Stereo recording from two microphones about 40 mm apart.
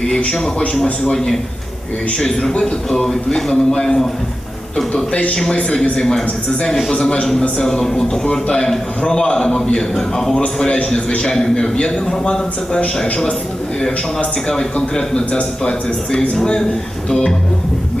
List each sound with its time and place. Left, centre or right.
1.1 s a man's voice: centre
5.3 s a man's voice: centre
10.4 s a man's voice: left
14.4 s a man's voice: centre